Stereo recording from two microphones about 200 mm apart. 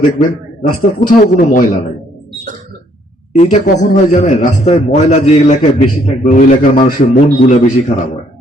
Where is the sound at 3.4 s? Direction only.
35° left (ahead or behind).